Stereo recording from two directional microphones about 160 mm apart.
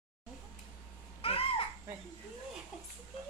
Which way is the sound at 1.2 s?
35° left (ahead or behind).